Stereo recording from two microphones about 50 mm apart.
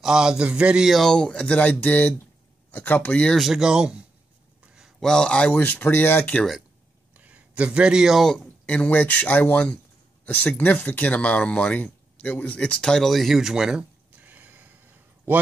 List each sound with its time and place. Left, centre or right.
0.0 s a man's voice: centre
0.8 s speech: centre
1.1 s speech: centre; by 3.2 s left
3.3 s speech: centre
3.6 s a man's voice: centre
5.0 s speech: centre
5.3 s speech: left
5.6 s speech: left
7.2 s a sound: right
8.6 s speech: left
13.0 s speech: centre
13.7 s a sound: right